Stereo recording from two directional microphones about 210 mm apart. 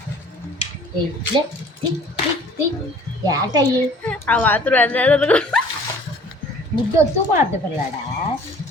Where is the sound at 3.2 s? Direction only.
20° right (ahead or behind).